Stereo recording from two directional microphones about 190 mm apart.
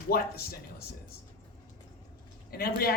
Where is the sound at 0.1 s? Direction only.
55° left (ahead or behind).